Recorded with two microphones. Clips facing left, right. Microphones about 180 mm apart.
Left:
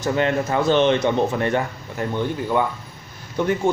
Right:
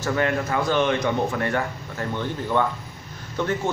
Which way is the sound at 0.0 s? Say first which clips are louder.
Left 3 dB; 20° left (ahead or behind).